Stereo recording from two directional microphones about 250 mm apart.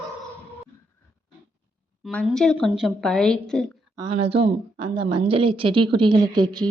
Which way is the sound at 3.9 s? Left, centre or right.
Right.